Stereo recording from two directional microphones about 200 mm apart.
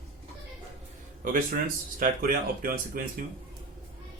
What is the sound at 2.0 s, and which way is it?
Speech, 45° right (ahead or behind).